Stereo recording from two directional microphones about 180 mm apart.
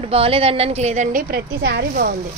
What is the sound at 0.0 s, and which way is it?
A woman's voice, 30° right (ahead or behind).